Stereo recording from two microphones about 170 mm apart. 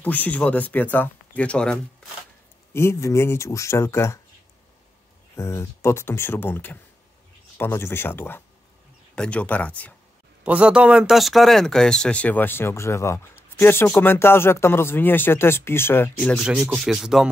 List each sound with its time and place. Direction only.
0.0 s speech: 10° left (ahead or behind)
5.3 s speech: 15° left (ahead or behind)
10.4 s speech: 5° right (ahead or behind); by 16.3 s 10° left (ahead or behind)
16.3 s speech: 5° right (ahead or behind)